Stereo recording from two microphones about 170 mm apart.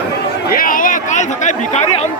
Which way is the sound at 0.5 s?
55° left (ahead or behind).